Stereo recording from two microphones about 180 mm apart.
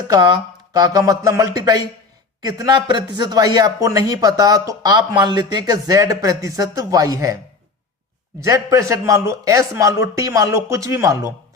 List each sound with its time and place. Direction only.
0.7 s speech: 20° right (ahead or behind)
8.4 s speech: 20° right (ahead or behind)